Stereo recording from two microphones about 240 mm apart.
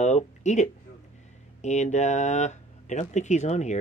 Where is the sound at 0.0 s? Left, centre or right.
Left.